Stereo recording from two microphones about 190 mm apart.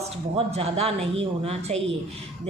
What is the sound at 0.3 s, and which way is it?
Speech, 35° right (ahead or behind).